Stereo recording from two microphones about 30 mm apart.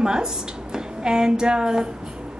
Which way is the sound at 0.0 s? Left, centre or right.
Right.